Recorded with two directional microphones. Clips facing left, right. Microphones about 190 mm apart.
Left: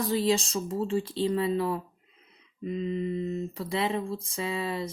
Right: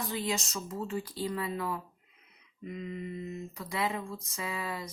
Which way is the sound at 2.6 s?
25° left (ahead or behind).